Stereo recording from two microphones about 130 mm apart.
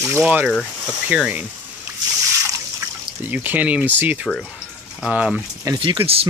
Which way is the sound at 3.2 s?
15° right (ahead or behind).